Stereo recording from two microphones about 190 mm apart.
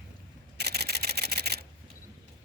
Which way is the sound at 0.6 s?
55° right (ahead or behind).